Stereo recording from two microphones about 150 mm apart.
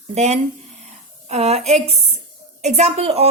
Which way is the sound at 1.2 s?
45° right (ahead or behind).